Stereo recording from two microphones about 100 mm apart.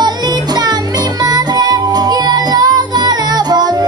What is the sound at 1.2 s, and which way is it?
Music, 40° right (ahead or behind).